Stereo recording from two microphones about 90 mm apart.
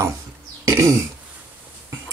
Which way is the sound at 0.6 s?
35° right (ahead or behind).